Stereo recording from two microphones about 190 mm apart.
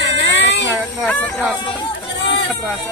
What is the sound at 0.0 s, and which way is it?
Baby cry, 70° left (ahead or behind).